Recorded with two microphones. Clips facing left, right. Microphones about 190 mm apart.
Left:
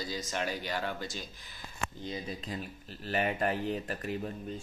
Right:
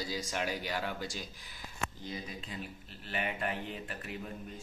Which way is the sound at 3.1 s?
40° left (ahead or behind).